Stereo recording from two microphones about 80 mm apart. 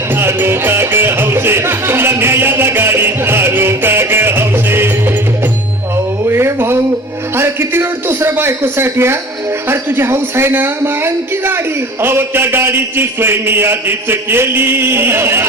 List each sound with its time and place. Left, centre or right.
0.2 s music: right
6.2 s music: right
7.3 s a sound: right
9.6 s a man's voice: right